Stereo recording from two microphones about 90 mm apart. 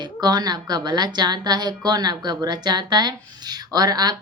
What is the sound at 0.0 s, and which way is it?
A woman's voice, 50° right (ahead or behind).